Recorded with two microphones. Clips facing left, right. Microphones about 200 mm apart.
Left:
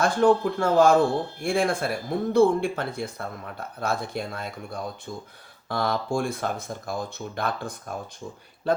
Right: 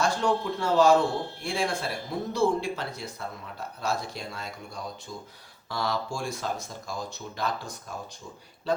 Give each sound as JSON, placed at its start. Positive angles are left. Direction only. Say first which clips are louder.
{"t": 0.0, "sound": "a man's voice", "louder": "left 6 dB", "side_deg": 55}